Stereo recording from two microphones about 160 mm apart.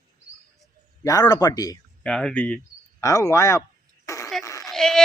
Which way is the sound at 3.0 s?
20° left (ahead or behind).